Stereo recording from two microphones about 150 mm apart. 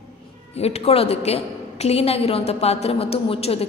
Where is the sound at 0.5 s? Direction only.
45° left (ahead or behind).